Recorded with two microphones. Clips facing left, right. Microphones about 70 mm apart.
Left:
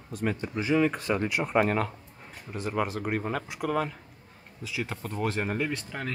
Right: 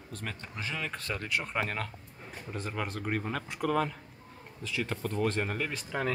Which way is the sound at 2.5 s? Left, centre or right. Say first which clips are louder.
Left 6 dB; centre.